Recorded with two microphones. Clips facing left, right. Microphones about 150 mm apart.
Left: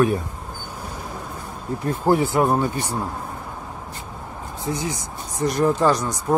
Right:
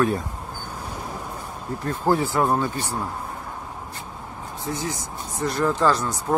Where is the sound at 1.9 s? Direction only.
15° left (ahead or behind).